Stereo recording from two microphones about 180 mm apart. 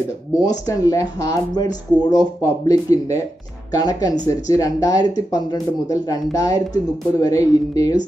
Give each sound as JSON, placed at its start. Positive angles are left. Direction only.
{"t": 0.4, "sound": "speech", "side_deg": 20}